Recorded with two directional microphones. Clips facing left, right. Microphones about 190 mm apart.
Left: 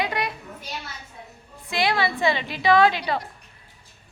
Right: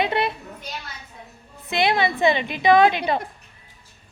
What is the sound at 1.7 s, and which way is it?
A woman's voice, 20° right (ahead or behind).